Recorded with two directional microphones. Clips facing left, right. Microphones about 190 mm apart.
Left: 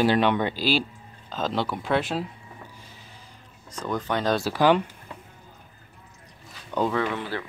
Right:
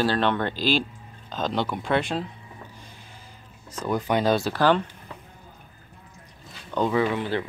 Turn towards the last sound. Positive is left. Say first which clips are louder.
# right 3 dB
turn(degrees=-10)  # may be behind; listen again after turning